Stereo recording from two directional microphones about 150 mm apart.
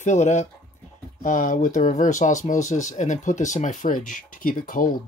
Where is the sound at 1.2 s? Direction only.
60° left (ahead or behind).